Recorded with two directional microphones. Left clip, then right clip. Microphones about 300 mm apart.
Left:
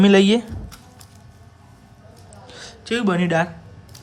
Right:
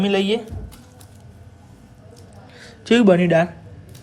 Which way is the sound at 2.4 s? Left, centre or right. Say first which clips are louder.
Left 5 dB; centre.